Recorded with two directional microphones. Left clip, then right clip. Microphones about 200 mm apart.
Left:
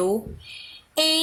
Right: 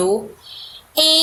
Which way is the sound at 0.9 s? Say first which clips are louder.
Right 7 dB; 20° left (ahead or behind).